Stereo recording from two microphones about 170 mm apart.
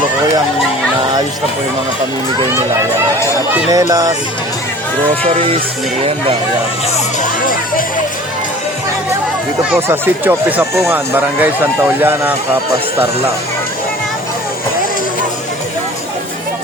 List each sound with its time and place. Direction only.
3.5 s speech: 20° right (ahead or behind)
5.2 s music: 35° right (ahead or behind)
9.7 s speech: 10° right (ahead or behind)